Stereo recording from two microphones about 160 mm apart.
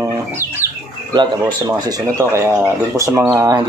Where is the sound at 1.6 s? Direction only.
20° right (ahead or behind).